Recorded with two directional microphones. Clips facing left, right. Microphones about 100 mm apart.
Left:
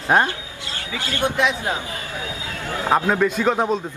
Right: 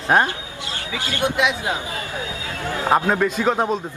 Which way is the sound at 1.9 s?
20° right (ahead or behind).